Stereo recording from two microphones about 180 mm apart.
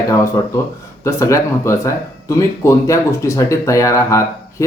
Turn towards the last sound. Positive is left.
turn(degrees=15)  # may be behind; listen again after turning